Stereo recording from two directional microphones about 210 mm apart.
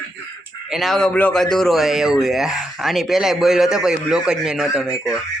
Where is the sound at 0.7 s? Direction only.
Centre (ahead or behind).